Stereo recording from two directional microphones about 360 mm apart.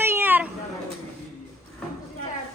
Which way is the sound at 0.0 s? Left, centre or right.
Centre.